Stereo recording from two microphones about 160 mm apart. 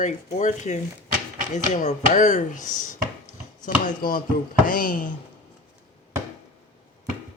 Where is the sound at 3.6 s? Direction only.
60° left (ahead or behind).